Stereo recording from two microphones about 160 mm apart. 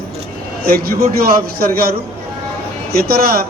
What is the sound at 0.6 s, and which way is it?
A man's voice, 70° right (ahead or behind).